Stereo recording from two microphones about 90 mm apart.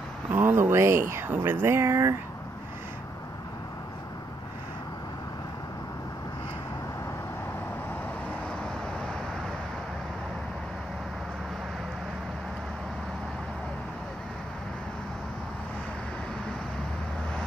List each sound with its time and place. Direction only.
0.3 s speech: 20° right (ahead or behind)